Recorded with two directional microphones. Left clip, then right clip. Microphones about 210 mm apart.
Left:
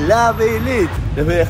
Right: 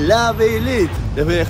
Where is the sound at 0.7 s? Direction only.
Centre (ahead or behind).